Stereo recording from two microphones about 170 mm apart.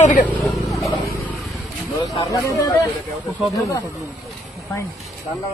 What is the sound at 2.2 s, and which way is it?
Speech, 20° left (ahead or behind).